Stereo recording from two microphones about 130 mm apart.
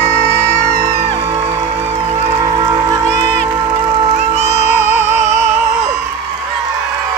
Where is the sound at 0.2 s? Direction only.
90° right.